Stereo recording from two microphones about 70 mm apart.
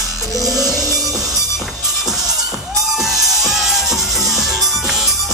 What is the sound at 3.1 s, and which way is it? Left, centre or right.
Music, centre.